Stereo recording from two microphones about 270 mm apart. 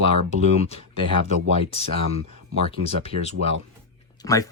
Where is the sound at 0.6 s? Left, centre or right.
Left.